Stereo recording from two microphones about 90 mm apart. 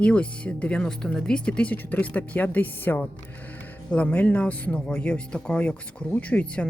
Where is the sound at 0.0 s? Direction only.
15° left (ahead or behind).